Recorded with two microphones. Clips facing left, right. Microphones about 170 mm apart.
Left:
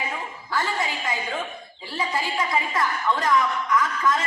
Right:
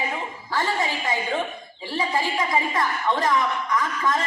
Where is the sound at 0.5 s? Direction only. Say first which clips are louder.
Right 2 dB; 30° right (ahead or behind).